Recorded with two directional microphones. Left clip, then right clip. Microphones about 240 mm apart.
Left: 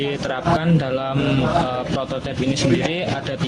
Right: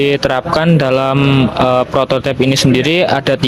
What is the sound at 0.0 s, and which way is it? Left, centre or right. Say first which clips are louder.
A man's voice: right 10 dB; right.